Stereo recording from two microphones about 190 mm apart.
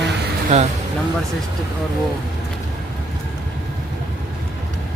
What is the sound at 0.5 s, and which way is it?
Speech, 35° right (ahead or behind).